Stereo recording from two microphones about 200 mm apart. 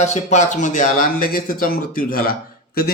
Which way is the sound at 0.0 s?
35° left (ahead or behind).